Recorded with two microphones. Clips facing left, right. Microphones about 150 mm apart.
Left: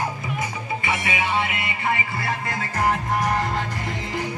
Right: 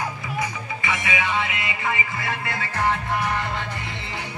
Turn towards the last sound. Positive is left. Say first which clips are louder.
# left 2 dB
turn(degrees=40)  # may be behind; listen again after turning